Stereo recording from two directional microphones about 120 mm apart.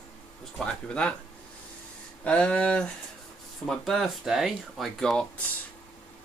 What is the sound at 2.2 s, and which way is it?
Speech, 10° left (ahead or behind).